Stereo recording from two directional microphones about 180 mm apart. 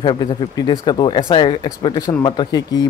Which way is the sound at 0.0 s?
25° left (ahead or behind).